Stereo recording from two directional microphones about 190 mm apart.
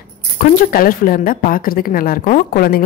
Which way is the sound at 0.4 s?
50° left (ahead or behind).